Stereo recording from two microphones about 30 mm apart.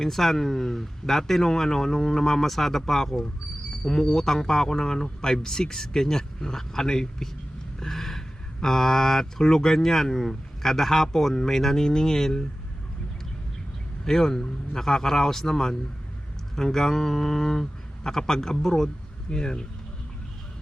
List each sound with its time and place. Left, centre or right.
0.0 s speech: centre
3.8 s speech: left
7.9 s a sound: centre
8.6 s speech: centre
14.0 s a man's voice: centre